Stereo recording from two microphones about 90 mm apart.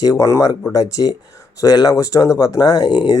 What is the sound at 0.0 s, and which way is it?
Speech, 35° left (ahead or behind).